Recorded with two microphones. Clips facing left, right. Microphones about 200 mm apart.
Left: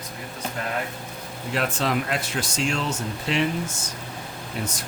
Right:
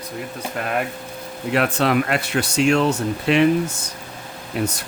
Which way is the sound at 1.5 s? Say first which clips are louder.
Right 6 dB; 65° right (ahead or behind).